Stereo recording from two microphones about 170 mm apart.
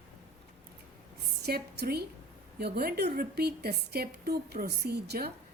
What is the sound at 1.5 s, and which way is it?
A woman's voice, 65° right (ahead or behind).